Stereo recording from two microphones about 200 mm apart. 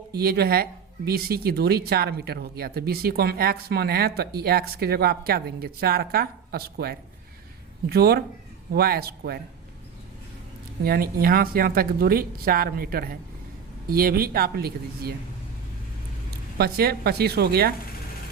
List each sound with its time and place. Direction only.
0.1 s speech: 50° right (ahead or behind)
10.8 s speech: 50° right (ahead or behind)
16.6 s speech: 50° right (ahead or behind)